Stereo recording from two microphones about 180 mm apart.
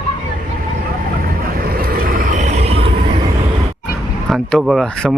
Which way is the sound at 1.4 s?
55° right (ahead or behind).